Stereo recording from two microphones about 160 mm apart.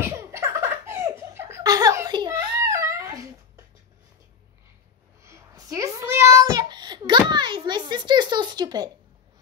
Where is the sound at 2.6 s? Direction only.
20° right (ahead or behind).